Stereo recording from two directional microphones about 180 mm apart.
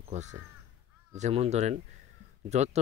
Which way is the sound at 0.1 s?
40° right (ahead or behind).